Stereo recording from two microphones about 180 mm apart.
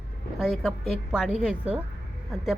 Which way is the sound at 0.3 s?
Centre (ahead or behind).